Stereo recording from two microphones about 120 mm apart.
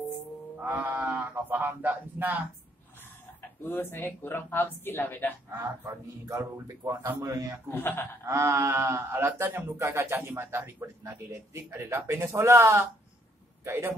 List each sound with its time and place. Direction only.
0.6 s speech: 15° right (ahead or behind)
3.6 s a woman's voice: 20° left (ahead or behind)
5.5 s speech: 25° right (ahead or behind)
7.7 s a woman's voice: 15° left (ahead or behind)
8.3 s speech: 25° right (ahead or behind)